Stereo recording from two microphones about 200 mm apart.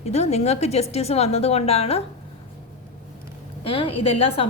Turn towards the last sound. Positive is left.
turn(degrees=30)  # may be behind; listen again after turning